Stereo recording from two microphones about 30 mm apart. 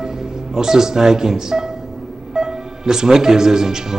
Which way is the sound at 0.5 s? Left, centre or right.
Centre.